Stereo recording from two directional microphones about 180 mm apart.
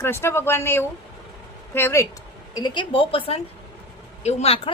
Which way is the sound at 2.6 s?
25° left (ahead or behind).